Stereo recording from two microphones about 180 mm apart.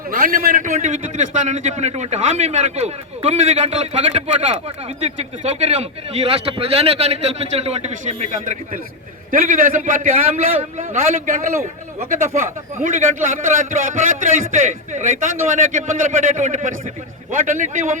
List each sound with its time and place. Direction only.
0.1 s a man's voice: 50° right (ahead or behind)